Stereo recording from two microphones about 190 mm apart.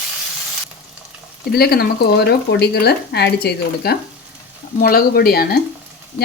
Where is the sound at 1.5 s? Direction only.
55° left (ahead or behind).